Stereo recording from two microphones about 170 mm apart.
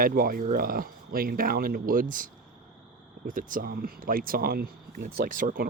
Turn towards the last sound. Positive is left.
turn(degrees=-50)  # may be behind; listen again after turning